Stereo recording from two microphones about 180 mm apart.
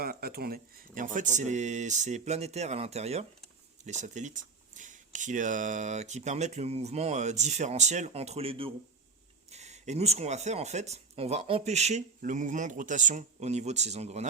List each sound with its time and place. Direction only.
0.0 s speech: 55° right (ahead or behind); by 14.3 s 35° right (ahead or behind)